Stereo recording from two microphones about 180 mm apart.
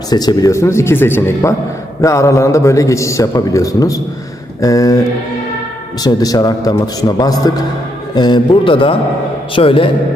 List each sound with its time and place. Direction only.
0.1 s a man's voice: 20° left (ahead or behind)
6.0 s a man's voice: 20° left (ahead or behind)